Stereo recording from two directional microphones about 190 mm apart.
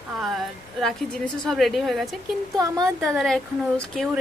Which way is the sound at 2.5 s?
20° right (ahead or behind).